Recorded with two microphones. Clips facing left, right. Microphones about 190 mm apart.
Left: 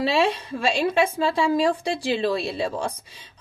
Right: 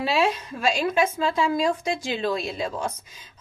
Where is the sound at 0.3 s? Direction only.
30° left (ahead or behind).